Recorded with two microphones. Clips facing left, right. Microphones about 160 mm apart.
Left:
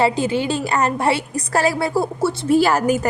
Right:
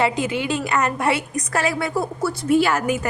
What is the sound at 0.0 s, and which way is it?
A woman's voice, 30° left (ahead or behind).